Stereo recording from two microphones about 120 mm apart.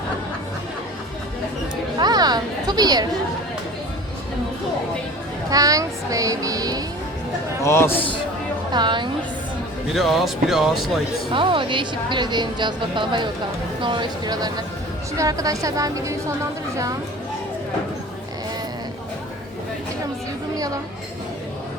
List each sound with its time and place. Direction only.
1.7 s chatter: 35° right (ahead or behind)
5.5 s music: 30° right (ahead or behind)
7.6 s a man's voice: 20° left (ahead or behind)
8.7 s speech: 40° right (ahead or behind)
9.9 s speech: centre (ahead or behind)
11.3 s a woman's voice: 45° right (ahead or behind); by 16.9 s 25° right (ahead or behind)